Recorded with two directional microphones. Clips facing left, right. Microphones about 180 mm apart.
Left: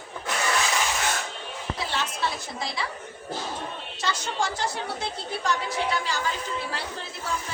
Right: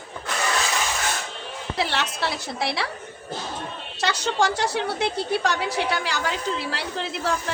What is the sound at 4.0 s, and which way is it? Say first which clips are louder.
A woman's voice: right 6 dB; 75° right (ahead or behind).